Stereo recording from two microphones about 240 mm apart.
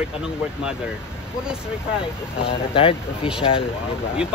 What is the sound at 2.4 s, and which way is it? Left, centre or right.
Speech, left.